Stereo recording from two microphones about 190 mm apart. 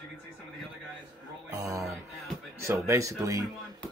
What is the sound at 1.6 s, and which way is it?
Music, 15° right (ahead or behind).